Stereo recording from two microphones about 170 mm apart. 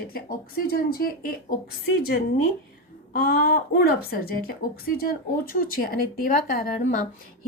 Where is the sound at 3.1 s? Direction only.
65° left (ahead or behind).